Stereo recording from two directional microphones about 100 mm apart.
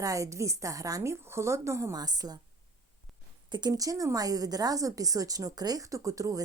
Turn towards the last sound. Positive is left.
turn(degrees=-35)  # may be behind; listen again after turning